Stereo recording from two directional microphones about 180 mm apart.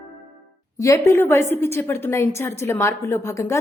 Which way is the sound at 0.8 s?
15° left (ahead or behind).